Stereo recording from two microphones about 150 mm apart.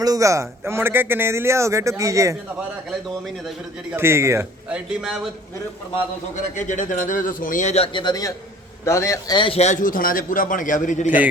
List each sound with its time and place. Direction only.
0.0 s a man's voice: 25° right (ahead or behind)
3.9 s a man's voice: 15° right (ahead or behind)
4.7 s speech: 5° right (ahead or behind)
6.4 s a man's voice: 55° left (ahead or behind)
7.9 s a man's voice: 25° left (ahead or behind); by 9.7 s 40° left (ahead or behind)
9.8 s a man's voice: 70° left (ahead or behind)